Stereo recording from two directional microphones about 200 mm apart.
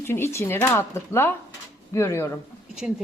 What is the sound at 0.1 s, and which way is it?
A woman's voice, 15° left (ahead or behind).